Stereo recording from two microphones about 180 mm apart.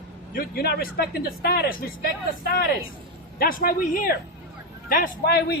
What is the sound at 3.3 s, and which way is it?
A man's voice, 55° left (ahead or behind).